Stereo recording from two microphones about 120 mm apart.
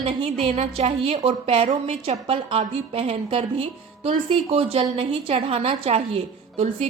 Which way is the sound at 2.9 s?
55° right (ahead or behind).